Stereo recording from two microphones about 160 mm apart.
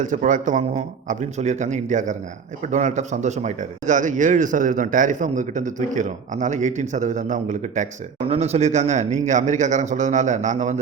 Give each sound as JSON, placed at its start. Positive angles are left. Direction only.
{"t": 0.0, "sound": "speech", "side_deg": -55}